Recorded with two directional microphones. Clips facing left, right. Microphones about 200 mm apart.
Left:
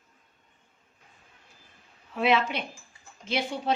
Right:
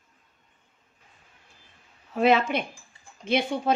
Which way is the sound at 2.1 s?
45° right (ahead or behind).